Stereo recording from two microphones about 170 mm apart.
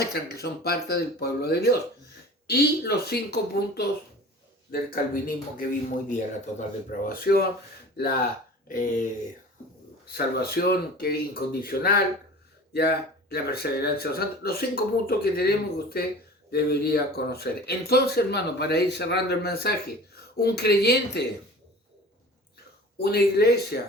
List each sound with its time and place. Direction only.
0.0 s speech: 70° left (ahead or behind)
4.7 s speech: 60° left (ahead or behind)
6.1 s speech: 45° left (ahead or behind)
7.1 s speech: 65° left (ahead or behind)
8.6 s speech: 50° left (ahead or behind)
10.2 s speech: 65° left (ahead or behind)
23.0 s speech: 70° left (ahead or behind)